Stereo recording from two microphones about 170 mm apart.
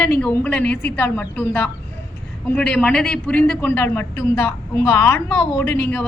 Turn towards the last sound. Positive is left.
turn(degrees=15)  # may be behind; listen again after turning